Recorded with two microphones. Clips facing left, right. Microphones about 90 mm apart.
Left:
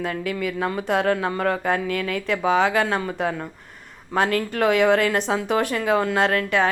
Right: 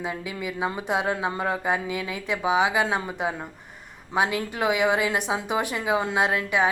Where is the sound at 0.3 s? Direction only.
15° right (ahead or behind).